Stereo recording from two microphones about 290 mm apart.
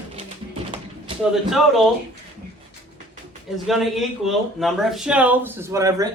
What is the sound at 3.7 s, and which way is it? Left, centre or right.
Speech, centre.